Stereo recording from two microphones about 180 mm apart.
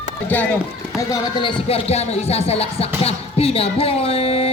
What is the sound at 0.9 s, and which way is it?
Speech, 25° left (ahead or behind).